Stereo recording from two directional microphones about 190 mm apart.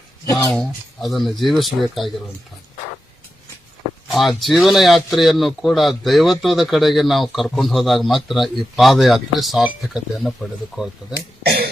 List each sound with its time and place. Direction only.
0.5 s a man's voice: centre (ahead or behind)
4.1 s a man's voice: centre (ahead or behind)
11.4 s a sound: 55° right (ahead or behind)